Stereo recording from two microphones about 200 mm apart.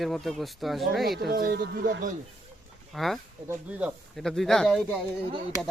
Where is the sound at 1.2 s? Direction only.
50° right (ahead or behind).